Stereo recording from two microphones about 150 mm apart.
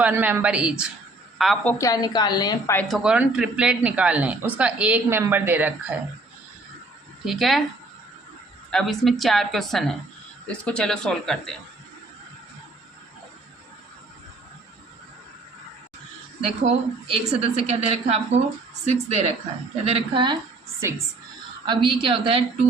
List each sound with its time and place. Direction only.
0.0 s a man's voice: 10° right (ahead or behind)
1.8 s a woman's voice: 25° left (ahead or behind)
2.8 s a man's voice: centre (ahead or behind)
7.3 s a woman's voice: centre (ahead or behind)
8.7 s a woman's voice: centre (ahead or behind)
16.4 s a woman's voice: 40° right (ahead or behind)
20.8 s a woman's voice: 20° right (ahead or behind)
21.7 s a woman's voice: 35° right (ahead or behind)